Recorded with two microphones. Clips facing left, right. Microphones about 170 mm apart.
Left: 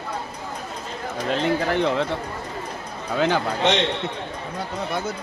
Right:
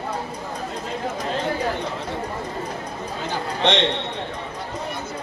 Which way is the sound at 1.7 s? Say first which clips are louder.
Left 7 dB; 80° left.